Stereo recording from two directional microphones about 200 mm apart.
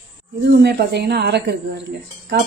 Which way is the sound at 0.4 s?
55° right (ahead or behind).